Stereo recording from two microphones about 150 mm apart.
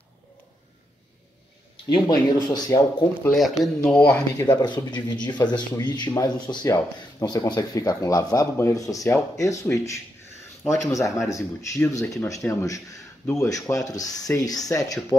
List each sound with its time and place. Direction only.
1.9 s speech: 30° left (ahead or behind)
3.3 s speech: centre (ahead or behind)
4.5 s speech: 30° left (ahead or behind)